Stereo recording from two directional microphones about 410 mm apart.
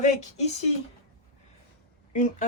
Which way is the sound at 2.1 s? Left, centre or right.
Centre.